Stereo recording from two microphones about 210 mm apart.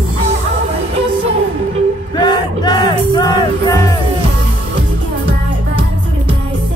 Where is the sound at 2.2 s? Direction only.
20° left (ahead or behind).